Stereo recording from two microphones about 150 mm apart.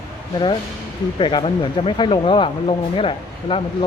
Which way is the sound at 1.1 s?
30° left (ahead or behind).